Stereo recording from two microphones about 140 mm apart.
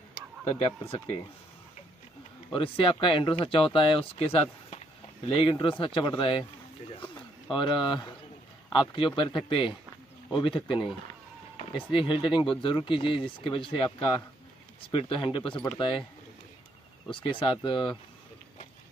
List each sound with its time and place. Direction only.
2.5 s speech: 40° left (ahead or behind)
7.5 s speech: 35° left (ahead or behind)
17.1 s speech: 35° left (ahead or behind)